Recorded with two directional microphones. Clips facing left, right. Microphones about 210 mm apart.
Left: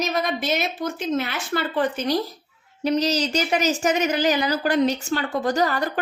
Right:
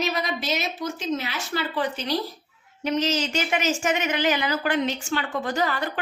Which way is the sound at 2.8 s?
35° left (ahead or behind).